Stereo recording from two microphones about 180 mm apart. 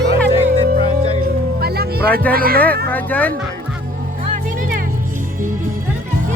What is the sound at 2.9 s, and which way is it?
Speech, 10° left (ahead or behind).